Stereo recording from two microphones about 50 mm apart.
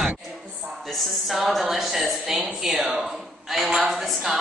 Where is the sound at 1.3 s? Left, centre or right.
Centre.